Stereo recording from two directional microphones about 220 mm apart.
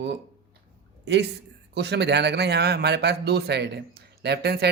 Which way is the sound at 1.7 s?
50° right (ahead or behind).